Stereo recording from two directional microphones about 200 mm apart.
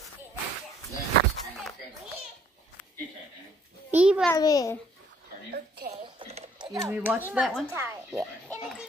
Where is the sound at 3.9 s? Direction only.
5° right (ahead or behind).